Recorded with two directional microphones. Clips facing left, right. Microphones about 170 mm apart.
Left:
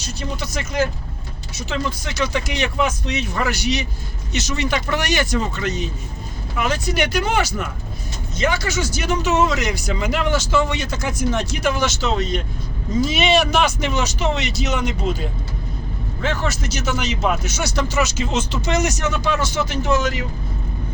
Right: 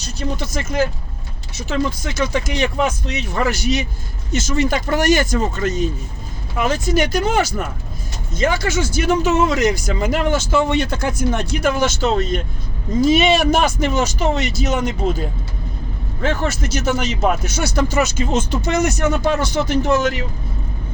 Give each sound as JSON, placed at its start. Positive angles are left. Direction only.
{"t": 0.3, "sound": "speech", "side_deg": -50}